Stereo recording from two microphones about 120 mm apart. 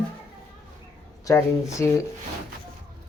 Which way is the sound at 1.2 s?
25° left (ahead or behind).